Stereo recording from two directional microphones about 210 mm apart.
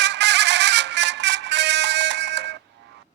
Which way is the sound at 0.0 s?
55° right (ahead or behind).